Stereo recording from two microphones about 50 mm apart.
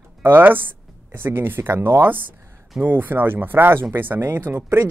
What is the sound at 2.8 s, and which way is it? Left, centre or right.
Speech, right.